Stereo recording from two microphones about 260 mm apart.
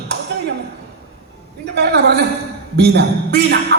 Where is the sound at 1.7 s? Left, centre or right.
Right.